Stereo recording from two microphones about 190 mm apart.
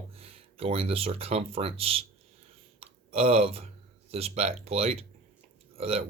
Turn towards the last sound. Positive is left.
turn(degrees=-35)  # may be behind; listen again after turning